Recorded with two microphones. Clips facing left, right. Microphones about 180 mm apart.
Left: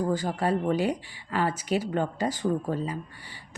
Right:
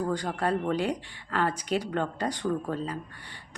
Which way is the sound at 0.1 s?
5° left (ahead or behind).